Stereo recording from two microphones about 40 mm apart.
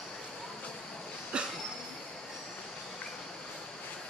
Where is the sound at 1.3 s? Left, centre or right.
Right.